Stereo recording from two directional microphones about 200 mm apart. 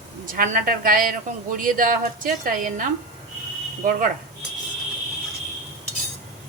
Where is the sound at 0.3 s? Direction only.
40° right (ahead or behind).